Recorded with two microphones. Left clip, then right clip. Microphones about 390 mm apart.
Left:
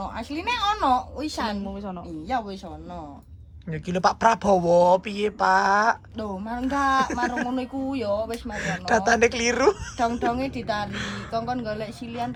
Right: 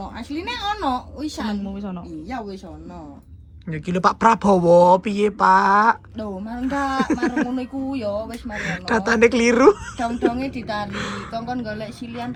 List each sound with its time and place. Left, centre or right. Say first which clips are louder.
0.0 s speech: even; centre
1.7 s a woman's voice: right 1 dB; centre
3.7 s speech: right 3 dB; centre